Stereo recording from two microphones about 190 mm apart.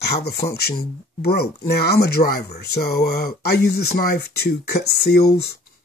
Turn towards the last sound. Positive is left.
turn(degrees=60)  # may be behind; listen again after turning